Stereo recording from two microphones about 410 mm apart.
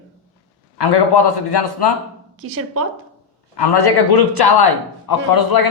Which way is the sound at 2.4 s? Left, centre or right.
Right.